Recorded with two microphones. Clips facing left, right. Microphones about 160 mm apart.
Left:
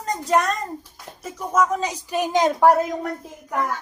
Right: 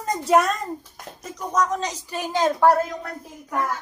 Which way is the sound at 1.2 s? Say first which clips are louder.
Left 2 dB; 10° left (ahead or behind).